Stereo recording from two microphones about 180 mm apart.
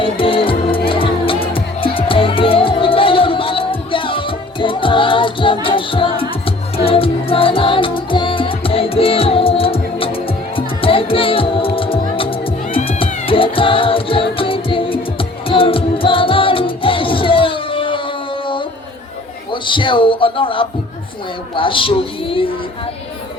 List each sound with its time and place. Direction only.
0.0 s music: 30° left (ahead or behind)
19.6 s a man's voice: 25° left (ahead or behind)